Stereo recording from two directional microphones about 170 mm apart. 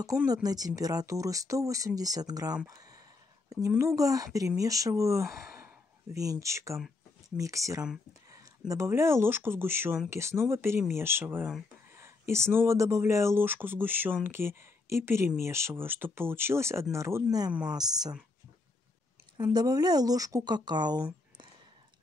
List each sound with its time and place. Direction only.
0.0 s speech: 20° right (ahead or behind)
17.5 s speech: 5° right (ahead or behind)
19.3 s speech: 25° right (ahead or behind)